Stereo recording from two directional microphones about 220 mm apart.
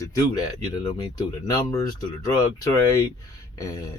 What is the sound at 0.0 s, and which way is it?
Speech, 15° left (ahead or behind).